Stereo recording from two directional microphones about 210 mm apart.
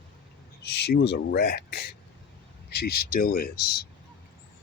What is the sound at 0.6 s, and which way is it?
Speech, 50° left (ahead or behind).